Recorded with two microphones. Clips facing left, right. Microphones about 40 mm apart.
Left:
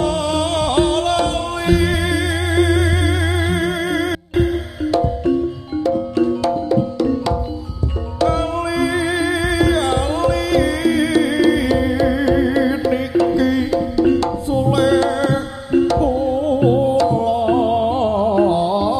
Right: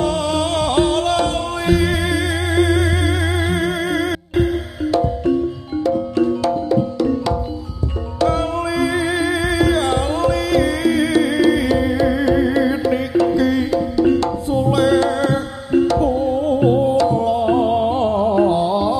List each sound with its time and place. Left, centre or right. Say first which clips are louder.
0.0 s music: even; centre